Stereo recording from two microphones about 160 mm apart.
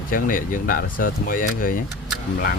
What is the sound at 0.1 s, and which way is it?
Speech, 60° left (ahead or behind).